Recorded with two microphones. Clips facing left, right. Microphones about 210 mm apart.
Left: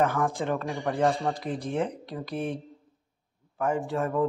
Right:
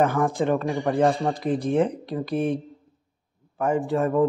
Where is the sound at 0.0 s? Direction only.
20° right (ahead or behind).